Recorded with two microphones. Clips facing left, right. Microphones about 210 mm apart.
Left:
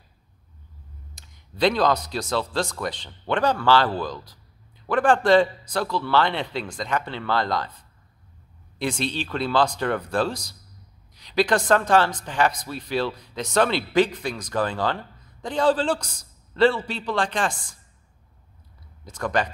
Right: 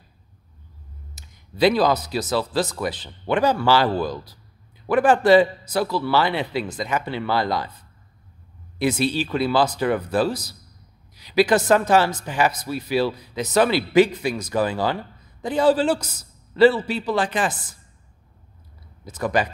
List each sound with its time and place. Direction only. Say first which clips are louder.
1.1 s speech: right 5 dB; 5° right (ahead or behind)
8.7 s speech: right 5 dB; 5° right (ahead or behind)
19.0 s speech: right 2 dB; 5° right (ahead or behind)